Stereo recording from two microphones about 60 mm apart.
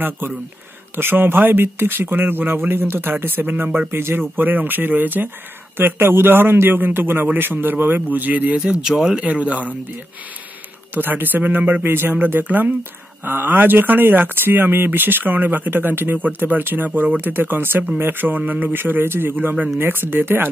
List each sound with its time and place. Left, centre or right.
0.9 s speech: right
3.9 s speech: right
4.4 s speech: right; by 9.2 s centre
9.2 s speech: right
11.0 s speech: right